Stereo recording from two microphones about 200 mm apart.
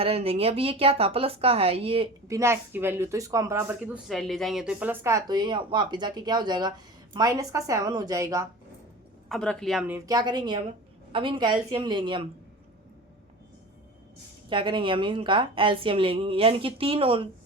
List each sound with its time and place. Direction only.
0.0 s a woman's voice: 30° right (ahead or behind)
2.2 s speech: 15° right (ahead or behind)
9.3 s a woman's voice: 5° left (ahead or behind)
10.1 s a woman's voice: 20° right (ahead or behind)
14.5 s a woman's voice: 25° right (ahead or behind)